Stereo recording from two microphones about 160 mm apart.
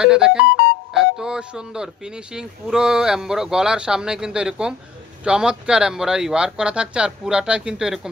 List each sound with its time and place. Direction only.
0.0 s speech: 5° right (ahead or behind)